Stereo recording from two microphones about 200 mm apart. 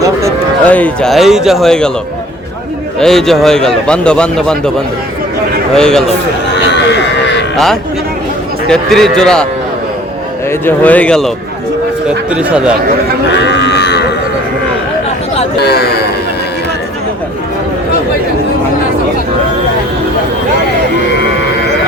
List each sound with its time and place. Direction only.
0.0 s a sound: 15° right (ahead or behind)
0.6 s a man's voice: 5° left (ahead or behind)
3.0 s a man's voice: centre (ahead or behind)
5.7 s a man's voice: 5° left (ahead or behind)
6.5 s sheep: 60° left (ahead or behind)
7.5 s a man's voice: centre (ahead or behind)
10.7 s speech: 10° left (ahead or behind)
12.0 s a man's voice: 5° right (ahead or behind)
13.5 s cattle: 60° left (ahead or behind)